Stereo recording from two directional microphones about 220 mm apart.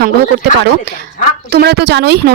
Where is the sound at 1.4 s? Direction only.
45° right (ahead or behind).